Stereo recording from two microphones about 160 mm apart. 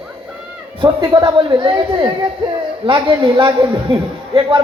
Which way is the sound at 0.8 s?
30° right (ahead or behind).